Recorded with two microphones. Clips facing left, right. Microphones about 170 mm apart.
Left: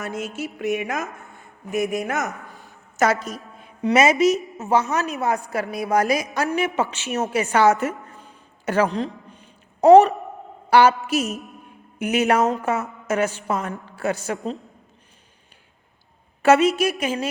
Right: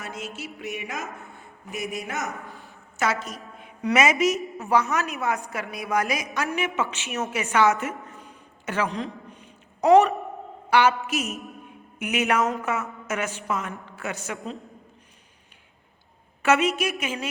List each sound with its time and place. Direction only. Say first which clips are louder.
0.0 s a sound: left 7 dB; 45° left (ahead or behind)
0.3 s music: left 9 dB; 45° left (ahead or behind)
2.6 s a sound: left 8 dB; 40° left (ahead or behind)
3.9 s a woman's voice: left 4 dB; 35° left (ahead or behind)
4.2 s a woman's voice: left 5 dB; centre (ahead or behind)
4.5 s a woman's voice: left 2 dB; 25° left (ahead or behind)
9.0 s a sound: left 5 dB; 35° left (ahead or behind)
10.7 s a woman's voice: left 5 dB; 35° left (ahead or behind)
16.4 s a woman's voice: left 5 dB; 35° left (ahead or behind)